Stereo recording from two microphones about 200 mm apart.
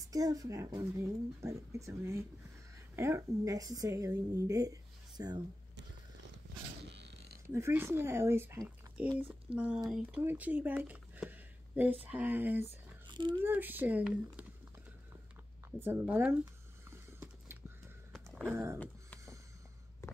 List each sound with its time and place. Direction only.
0.1 s a woman's voice: 20° right (ahead or behind)
6.9 s a sound: 60° right (ahead or behind)
7.4 s a woman's voice: 15° right (ahead or behind)
9.5 s speech: 30° right (ahead or behind)
9.8 s speech: 5° right (ahead or behind)
13.0 s a sound: 25° right (ahead or behind)
13.4 s a woman's voice: 10° right (ahead or behind)
15.8 s a woman's voice: 10° right (ahead or behind)
17.2 s a sound: 10° right (ahead or behind)
18.4 s a woman's voice: 15° right (ahead or behind)